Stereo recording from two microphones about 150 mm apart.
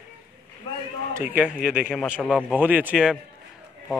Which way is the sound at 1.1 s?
10° right (ahead or behind).